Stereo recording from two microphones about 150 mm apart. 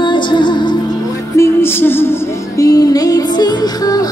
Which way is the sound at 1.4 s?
15° left (ahead or behind).